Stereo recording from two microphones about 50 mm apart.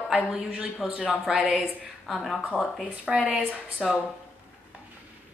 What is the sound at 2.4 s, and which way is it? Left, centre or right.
Speech, left.